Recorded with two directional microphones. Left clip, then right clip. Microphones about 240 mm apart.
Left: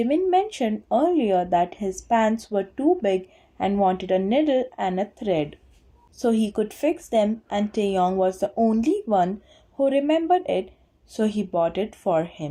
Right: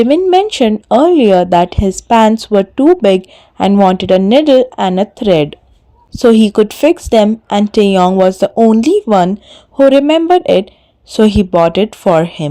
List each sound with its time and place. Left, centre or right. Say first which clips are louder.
0.0 s speech: right 12 dB; right